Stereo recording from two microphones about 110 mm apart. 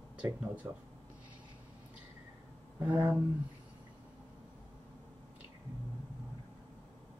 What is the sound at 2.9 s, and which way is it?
Speech, 25° right (ahead or behind).